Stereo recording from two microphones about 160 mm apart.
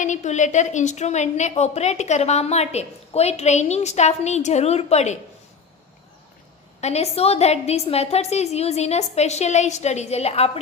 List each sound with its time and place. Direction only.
0.0 s a woman's voice: 50° left (ahead or behind)
6.8 s a woman's voice: 40° left (ahead or behind)